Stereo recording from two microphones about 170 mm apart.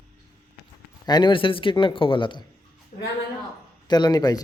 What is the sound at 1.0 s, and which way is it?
A man's voice, 25° left (ahead or behind).